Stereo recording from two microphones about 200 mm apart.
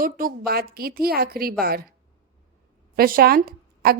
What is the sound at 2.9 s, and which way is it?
A woman's voice, 50° right (ahead or behind).